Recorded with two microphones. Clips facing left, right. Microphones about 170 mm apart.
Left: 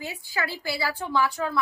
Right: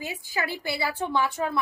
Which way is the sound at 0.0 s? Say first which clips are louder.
Even; 20° right (ahead or behind).